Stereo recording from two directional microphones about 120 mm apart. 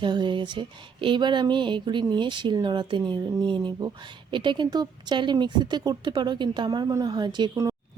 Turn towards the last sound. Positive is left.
turn(degrees=-40)  # may be behind; listen again after turning